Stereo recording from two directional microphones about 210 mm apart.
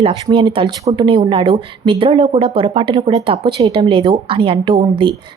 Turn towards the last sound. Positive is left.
turn(degrees=-25)  # may be behind; listen again after turning